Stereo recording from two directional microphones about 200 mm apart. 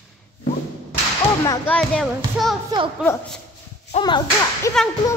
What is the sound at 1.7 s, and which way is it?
A woman's voice, 5° left (ahead or behind).